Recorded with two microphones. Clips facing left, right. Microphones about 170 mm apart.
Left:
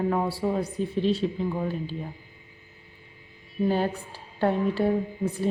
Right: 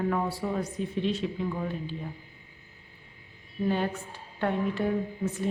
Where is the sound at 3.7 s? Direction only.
35° left (ahead or behind).